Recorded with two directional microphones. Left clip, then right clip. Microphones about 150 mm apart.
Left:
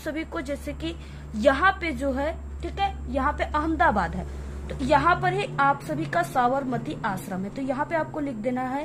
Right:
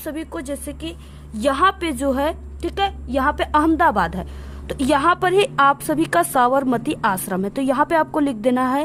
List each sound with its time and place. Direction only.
0.0 s a woman's voice: 40° right (ahead or behind); by 8.8 s 70° right (ahead or behind)